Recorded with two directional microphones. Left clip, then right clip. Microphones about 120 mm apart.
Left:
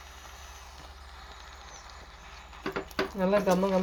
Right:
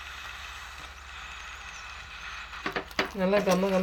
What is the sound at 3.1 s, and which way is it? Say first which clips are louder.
Speech: even; 5° right (ahead or behind).